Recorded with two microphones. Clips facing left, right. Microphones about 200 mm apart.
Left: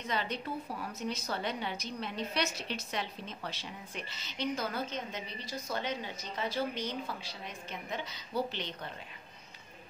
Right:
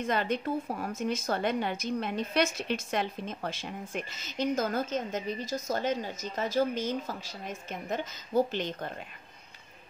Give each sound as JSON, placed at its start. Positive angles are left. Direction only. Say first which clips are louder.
{"t": 0.0, "sound": "speech", "louder": "right 7 dB", "side_deg": -50}